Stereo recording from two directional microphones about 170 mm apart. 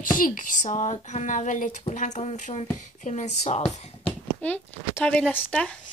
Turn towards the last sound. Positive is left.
turn(degrees=5)  # may be behind; listen again after turning